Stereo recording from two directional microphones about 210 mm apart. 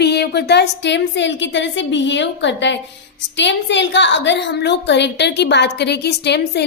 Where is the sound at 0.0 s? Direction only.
50° left (ahead or behind).